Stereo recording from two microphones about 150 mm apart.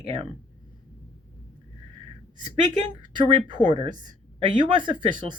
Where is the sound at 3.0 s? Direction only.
30° right (ahead or behind).